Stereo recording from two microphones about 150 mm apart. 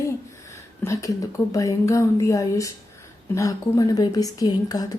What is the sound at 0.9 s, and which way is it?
A woman's voice, 20° left (ahead or behind).